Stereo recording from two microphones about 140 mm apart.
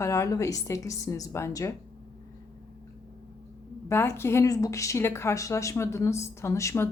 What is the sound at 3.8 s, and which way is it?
Speech, 20° left (ahead or behind).